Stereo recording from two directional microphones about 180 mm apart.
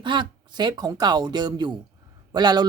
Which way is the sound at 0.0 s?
25° right (ahead or behind).